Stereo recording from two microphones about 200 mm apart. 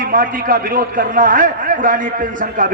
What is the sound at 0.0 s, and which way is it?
A man's voice, 45° right (ahead or behind).